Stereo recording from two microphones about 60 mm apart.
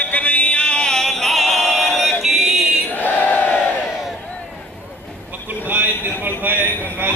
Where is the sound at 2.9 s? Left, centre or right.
Left.